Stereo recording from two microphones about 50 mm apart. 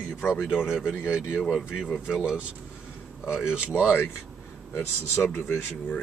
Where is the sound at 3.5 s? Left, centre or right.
Right.